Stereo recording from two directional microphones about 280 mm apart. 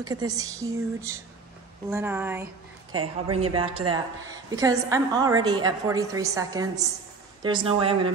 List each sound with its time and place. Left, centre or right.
0.0 s a woman's voice: centre
3.0 s speech: right
3.7 s a woman's voice: centre